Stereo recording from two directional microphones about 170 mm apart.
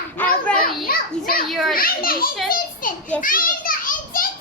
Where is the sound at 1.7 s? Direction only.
60° left (ahead or behind).